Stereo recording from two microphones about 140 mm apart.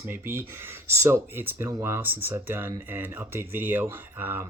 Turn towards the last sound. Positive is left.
turn(degrees=-15)  # may be behind; listen again after turning